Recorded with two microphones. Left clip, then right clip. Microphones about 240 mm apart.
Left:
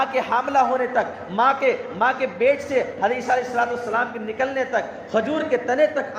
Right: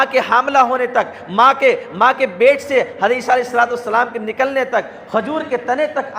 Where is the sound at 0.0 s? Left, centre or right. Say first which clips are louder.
Right 7 dB; right.